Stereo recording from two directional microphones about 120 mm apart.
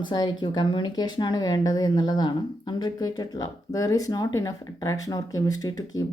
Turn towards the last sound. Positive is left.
turn(degrees=30)  # may be behind; listen again after turning